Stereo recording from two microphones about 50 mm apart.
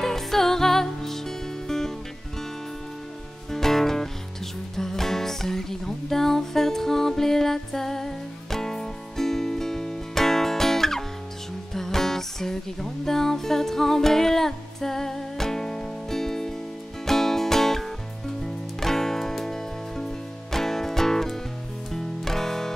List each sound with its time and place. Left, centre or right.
0.0 s music: centre
3.5 s music: centre